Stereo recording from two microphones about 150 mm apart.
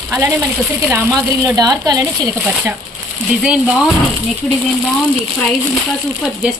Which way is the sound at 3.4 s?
5° right (ahead or behind).